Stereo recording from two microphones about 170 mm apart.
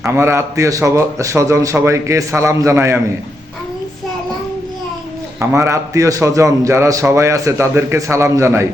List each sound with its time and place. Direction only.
0.0 s a man's voice: 15° right (ahead or behind)
5.4 s a man's voice: 15° right (ahead or behind)